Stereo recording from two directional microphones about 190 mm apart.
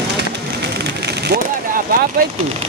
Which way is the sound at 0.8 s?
60° right (ahead or behind).